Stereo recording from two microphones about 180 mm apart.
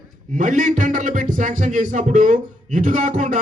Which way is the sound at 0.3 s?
45° right (ahead or behind).